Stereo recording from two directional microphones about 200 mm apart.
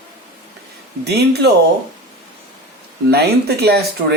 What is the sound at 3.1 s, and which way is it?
Speech, 55° right (ahead or behind).